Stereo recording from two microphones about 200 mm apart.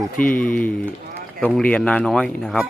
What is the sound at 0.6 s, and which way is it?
A man's voice, 10° left (ahead or behind).